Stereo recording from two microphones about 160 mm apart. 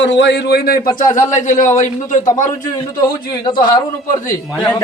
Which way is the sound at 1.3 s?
50° left (ahead or behind).